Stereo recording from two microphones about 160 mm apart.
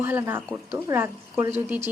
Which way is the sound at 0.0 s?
15° right (ahead or behind).